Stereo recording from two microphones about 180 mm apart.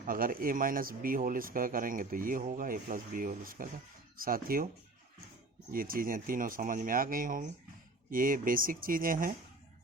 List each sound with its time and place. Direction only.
0.0 s speech: 50° right (ahead or behind)
5.7 s speech: 50° right (ahead or behind)